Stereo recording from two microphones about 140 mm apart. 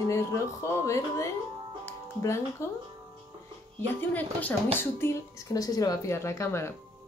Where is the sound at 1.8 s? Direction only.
20° left (ahead or behind).